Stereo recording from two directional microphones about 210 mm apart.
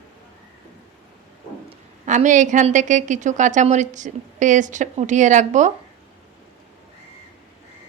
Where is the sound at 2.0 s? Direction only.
35° right (ahead or behind).